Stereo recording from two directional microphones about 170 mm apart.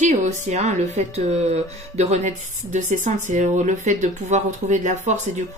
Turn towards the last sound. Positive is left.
turn(degrees=-45)  # may be behind; listen again after turning